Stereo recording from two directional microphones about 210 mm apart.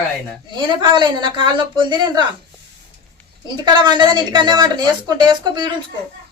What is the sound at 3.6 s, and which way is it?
A man's voice, 20° right (ahead or behind).